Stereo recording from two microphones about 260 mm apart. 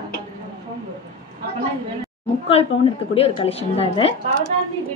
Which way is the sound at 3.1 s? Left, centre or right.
Centre.